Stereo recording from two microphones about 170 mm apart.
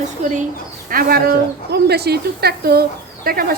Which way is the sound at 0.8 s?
60° right (ahead or behind).